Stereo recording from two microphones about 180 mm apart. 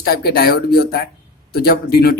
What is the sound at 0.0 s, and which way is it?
Speech, 60° left (ahead or behind).